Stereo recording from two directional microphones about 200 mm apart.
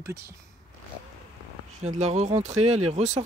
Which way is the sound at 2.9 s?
35° right (ahead or behind).